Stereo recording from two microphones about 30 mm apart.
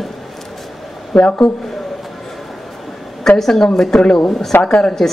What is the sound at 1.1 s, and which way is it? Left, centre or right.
Speech, left.